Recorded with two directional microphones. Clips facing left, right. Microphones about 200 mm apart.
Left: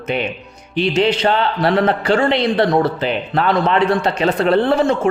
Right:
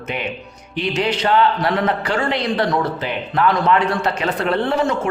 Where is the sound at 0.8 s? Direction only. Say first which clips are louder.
Left 5 dB; 30° left (ahead or behind).